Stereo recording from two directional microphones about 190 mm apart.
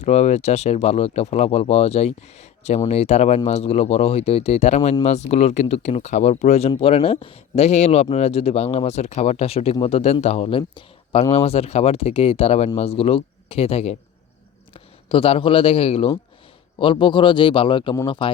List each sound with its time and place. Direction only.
0.0 s a man's voice: 35° left (ahead or behind)